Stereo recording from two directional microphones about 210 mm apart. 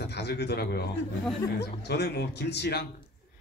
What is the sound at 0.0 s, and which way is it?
A man's voice, 50° left (ahead or behind).